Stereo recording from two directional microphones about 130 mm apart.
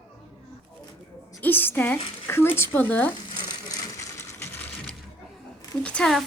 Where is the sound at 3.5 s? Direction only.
30° left (ahead or behind).